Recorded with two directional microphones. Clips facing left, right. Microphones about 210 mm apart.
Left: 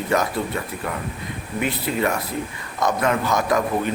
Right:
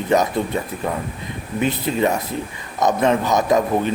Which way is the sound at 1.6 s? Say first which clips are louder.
Right 3 dB; 25° right (ahead or behind).